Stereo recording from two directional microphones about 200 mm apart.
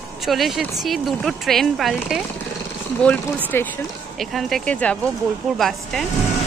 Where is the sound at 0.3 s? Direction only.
Centre (ahead or behind).